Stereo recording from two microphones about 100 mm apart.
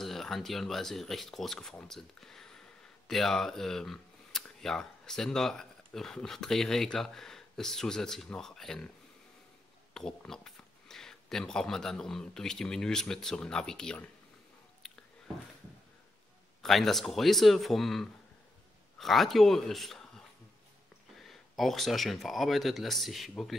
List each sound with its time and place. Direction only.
0.0 s speech: 5° left (ahead or behind)
9.9 s speech: 5° left (ahead or behind)
16.6 s a man's voice: centre (ahead or behind)